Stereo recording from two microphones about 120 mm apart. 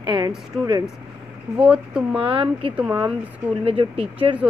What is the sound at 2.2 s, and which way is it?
Speech, 50° right (ahead or behind).